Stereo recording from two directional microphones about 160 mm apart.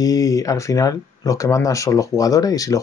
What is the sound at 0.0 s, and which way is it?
Speech, 20° left (ahead or behind).